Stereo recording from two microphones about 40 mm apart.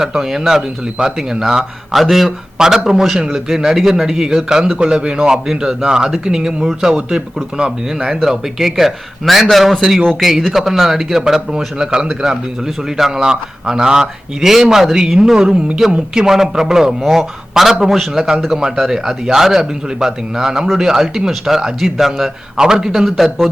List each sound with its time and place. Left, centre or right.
0.0 s a man's voice: centre
18.5 s a man's voice: centre
23.0 s a man's voice: centre